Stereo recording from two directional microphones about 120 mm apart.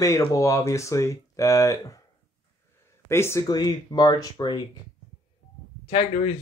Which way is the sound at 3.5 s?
35° left (ahead or behind).